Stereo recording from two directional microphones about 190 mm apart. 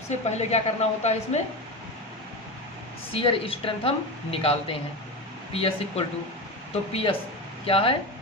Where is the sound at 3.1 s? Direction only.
30° left (ahead or behind).